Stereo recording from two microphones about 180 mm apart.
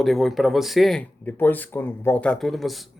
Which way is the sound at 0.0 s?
Centre (ahead or behind).